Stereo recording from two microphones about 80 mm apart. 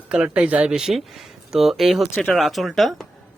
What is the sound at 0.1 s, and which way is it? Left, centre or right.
Speech, centre.